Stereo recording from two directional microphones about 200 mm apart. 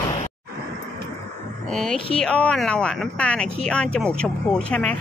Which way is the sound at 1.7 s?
5° left (ahead or behind).